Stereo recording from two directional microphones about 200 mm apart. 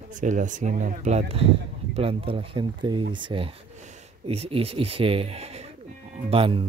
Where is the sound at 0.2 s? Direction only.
40° right (ahead or behind).